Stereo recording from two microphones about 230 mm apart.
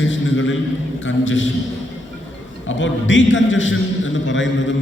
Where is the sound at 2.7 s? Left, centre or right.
Left.